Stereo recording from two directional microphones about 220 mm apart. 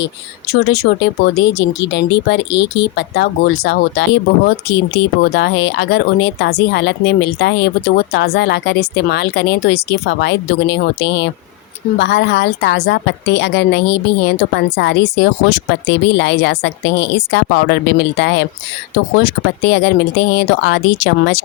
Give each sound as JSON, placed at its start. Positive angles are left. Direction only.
{"t": 0.0, "sound": "speech", "side_deg": 45}